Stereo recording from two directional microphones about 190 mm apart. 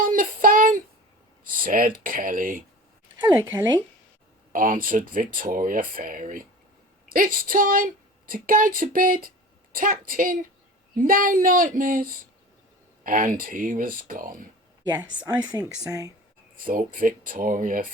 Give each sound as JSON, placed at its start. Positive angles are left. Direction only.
{"t": 0.0, "sound": "child singing", "side_deg": -45}
{"t": 1.6, "sound": "speech", "side_deg": -45}
{"t": 3.2, "sound": "speech", "side_deg": -20}
{"t": 4.5, "sound": "speech", "side_deg": -45}
{"t": 13.1, "sound": "speech", "side_deg": -45}
{"t": 14.8, "sound": "speech", "side_deg": -20}
{"t": 16.6, "sound": "speech", "side_deg": -45}